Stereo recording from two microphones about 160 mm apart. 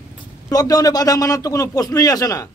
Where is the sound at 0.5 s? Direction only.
25° left (ahead or behind).